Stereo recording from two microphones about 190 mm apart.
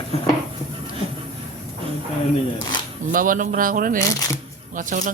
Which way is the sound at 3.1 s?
45° right (ahead or behind).